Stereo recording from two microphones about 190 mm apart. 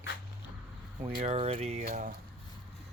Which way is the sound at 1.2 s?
35° right (ahead or behind).